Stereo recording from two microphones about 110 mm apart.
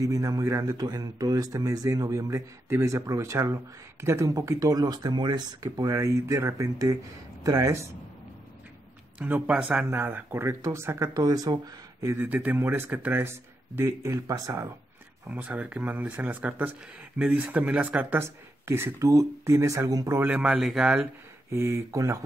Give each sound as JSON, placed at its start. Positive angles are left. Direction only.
{"t": 0.0, "sound": "speech", "side_deg": -30}
{"t": 9.2, "sound": "speech", "side_deg": -15}
{"t": 12.3, "sound": "speech", "side_deg": -15}
{"t": 15.3, "sound": "speech", "side_deg": -15}
{"t": 20.2, "sound": "speech", "side_deg": -15}
{"t": 21.5, "sound": "speech", "side_deg": -25}